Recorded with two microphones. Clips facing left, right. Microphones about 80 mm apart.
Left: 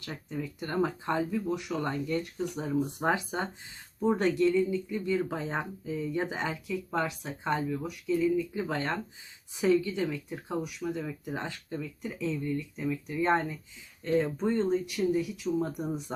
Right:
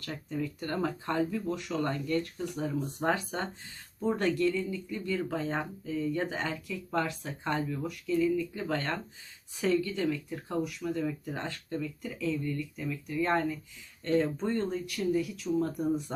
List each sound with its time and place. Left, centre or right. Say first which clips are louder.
0.0 s speech: right 2 dB; centre
14.0 s speech: left 1 dB; centre